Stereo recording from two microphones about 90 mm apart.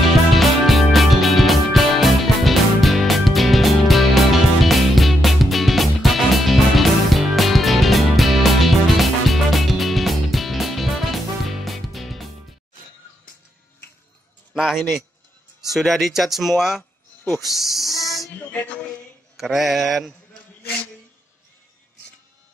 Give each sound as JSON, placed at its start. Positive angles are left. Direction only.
{"t": 0.0, "sound": "music", "side_deg": 0}
{"t": 14.5, "sound": "a sound", "side_deg": -5}
{"t": 15.7, "sound": "speech", "side_deg": 0}
{"t": 18.4, "sound": "music", "side_deg": 20}
{"t": 19.3, "sound": "speech", "side_deg": 0}